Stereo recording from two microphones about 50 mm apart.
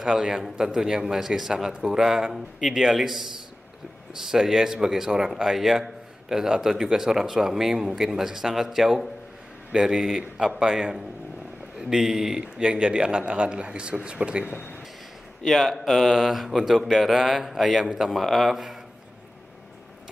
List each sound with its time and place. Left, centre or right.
0.0 s speech: centre
15.4 s speech: centre